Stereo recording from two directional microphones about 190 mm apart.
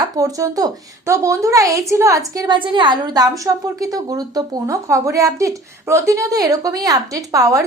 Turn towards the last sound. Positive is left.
turn(degrees=-15)  # may be behind; listen again after turning